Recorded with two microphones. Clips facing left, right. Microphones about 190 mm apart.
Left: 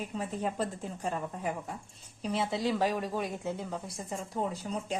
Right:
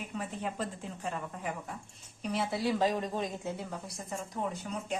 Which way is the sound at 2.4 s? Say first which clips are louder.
Right 1 dB; 15° left (ahead or behind).